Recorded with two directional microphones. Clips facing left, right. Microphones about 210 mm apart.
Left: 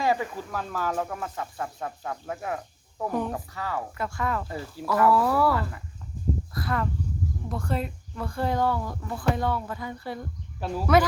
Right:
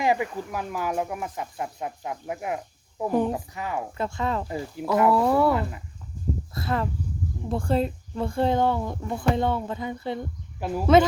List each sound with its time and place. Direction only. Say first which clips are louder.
0.0 s speech: right 2 dB; 15° right (ahead or behind)